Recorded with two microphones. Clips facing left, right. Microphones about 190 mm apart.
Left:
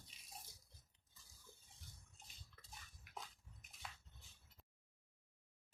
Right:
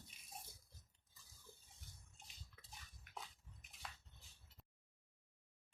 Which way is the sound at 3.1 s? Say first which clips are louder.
Even; centre (ahead or behind).